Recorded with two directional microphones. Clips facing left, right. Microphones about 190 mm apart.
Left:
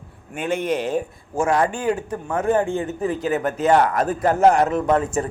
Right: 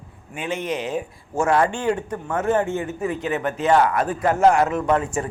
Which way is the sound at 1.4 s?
15° left (ahead or behind).